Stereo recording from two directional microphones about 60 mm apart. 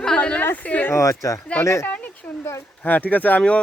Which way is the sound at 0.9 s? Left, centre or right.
Left.